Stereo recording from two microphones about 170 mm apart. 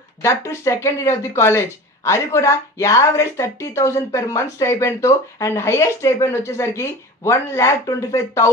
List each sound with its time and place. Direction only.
0.2 s speech: 15° left (ahead or behind)